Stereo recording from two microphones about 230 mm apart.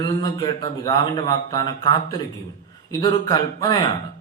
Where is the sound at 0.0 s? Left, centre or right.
Centre.